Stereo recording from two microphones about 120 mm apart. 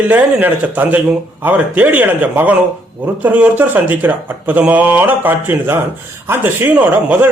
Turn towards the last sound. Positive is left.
turn(degrees=-15)  # may be behind; listen again after turning